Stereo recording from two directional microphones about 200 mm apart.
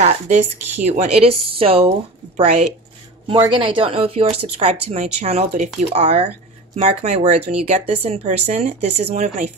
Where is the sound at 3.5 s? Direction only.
25° right (ahead or behind).